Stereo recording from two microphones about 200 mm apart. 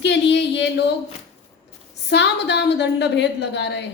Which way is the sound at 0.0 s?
60° left (ahead or behind).